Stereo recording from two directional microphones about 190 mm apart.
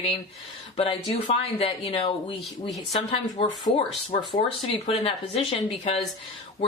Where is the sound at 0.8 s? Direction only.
30° left (ahead or behind).